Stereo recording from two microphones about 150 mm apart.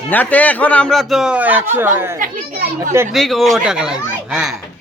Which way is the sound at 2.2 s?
65° right (ahead or behind).